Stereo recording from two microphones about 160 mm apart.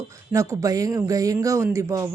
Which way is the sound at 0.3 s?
20° right (ahead or behind).